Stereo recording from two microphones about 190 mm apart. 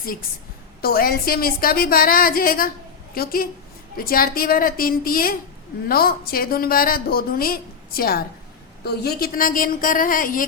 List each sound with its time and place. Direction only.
0.8 s a woman's voice: 50° left (ahead or behind)